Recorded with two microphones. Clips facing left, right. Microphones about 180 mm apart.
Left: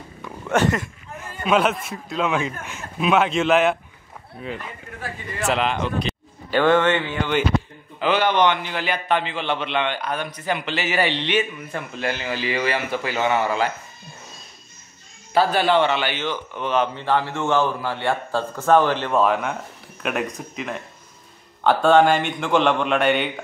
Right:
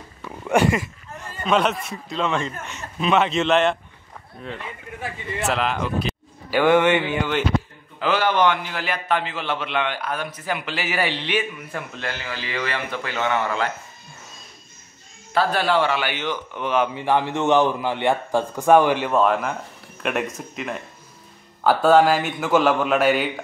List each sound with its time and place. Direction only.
0.2 s a sound: 10° right (ahead or behind)
1.1 s a man's voice: 5° left (ahead or behind)
5.0 s speech: 20° right (ahead or behind)
5.5 s a man's voice: centre (ahead or behind)
12.0 s a man's voice: 15° left (ahead or behind)
15.3 s a man's voice: centre (ahead or behind)
19.1 s a man's voice: centre (ahead or behind)